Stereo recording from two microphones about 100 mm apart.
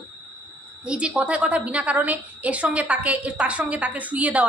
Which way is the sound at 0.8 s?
10° right (ahead or behind).